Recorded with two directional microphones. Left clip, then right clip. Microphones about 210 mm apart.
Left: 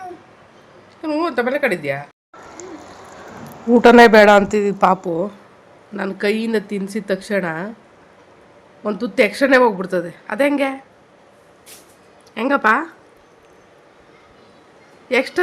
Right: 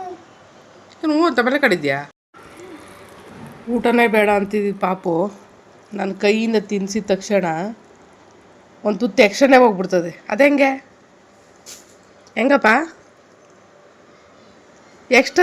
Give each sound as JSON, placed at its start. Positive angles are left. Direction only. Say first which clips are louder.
{"t": 1.0, "sound": "a woman's voice", "louder": "right 3 dB", "side_deg": -25}
{"t": 3.7, "sound": "speech", "louder": "left 8 dB", "side_deg": 15}
{"t": 8.8, "sound": "speech", "louder": "right 2 dB", "side_deg": 0}
{"t": 12.3, "sound": "speech", "louder": "right 2 dB", "side_deg": -10}
{"t": 15.1, "sound": "speech", "louder": "right 4 dB", "side_deg": -10}